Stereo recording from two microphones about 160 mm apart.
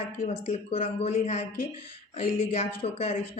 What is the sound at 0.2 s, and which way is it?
Speech, 40° left (ahead or behind).